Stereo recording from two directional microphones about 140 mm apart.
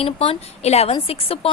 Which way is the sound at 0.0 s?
40° left (ahead or behind).